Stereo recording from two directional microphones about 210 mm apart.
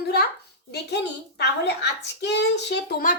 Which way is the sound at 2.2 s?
55° left (ahead or behind).